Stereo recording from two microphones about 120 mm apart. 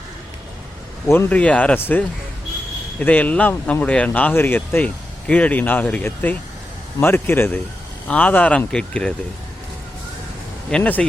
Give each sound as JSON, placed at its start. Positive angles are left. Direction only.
{"t": 1.0, "sound": "a man's voice", "side_deg": 15}
{"t": 10.7, "sound": "speech", "side_deg": 10}